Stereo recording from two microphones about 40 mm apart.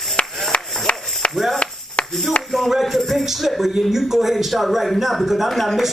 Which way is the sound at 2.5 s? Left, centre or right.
Centre.